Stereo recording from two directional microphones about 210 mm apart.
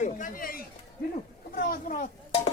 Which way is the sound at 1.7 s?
40° left (ahead or behind).